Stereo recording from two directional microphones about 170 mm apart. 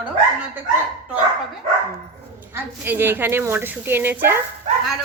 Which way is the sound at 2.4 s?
15° right (ahead or behind).